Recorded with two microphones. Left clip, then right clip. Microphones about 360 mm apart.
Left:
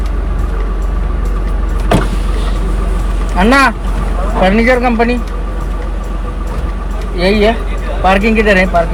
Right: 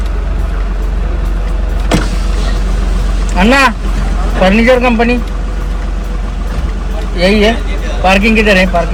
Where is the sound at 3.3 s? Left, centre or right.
Centre.